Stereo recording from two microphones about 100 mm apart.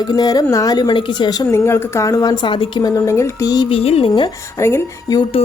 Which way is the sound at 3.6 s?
80° left.